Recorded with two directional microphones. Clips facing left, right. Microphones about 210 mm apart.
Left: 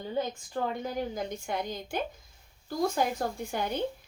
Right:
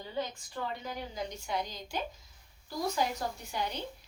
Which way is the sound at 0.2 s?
50° left (ahead or behind).